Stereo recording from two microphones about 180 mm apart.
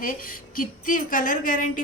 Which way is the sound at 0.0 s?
50° left (ahead or behind).